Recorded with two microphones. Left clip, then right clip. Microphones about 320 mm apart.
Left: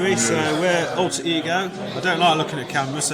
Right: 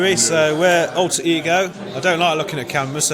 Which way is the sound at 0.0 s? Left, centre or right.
Right.